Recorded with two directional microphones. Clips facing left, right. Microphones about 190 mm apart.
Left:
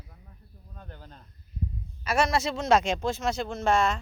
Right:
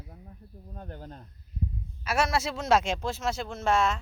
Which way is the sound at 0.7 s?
45° right (ahead or behind).